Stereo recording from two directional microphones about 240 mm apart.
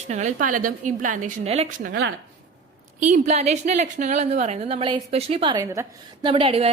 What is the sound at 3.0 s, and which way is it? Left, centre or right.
A woman's voice, right.